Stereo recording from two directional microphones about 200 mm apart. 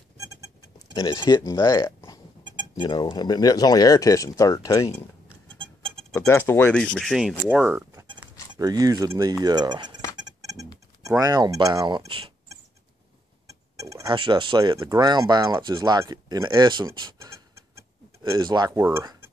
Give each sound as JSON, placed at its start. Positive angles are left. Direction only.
{"t": 0.7, "sound": "speech", "side_deg": 20}
{"t": 5.6, "sound": "music", "side_deg": -25}
{"t": 6.1, "sound": "speech", "side_deg": 10}
{"t": 10.1, "sound": "a sound", "side_deg": -20}
{"t": 11.0, "sound": "speech", "side_deg": -15}
{"t": 13.7, "sound": "speech", "side_deg": -15}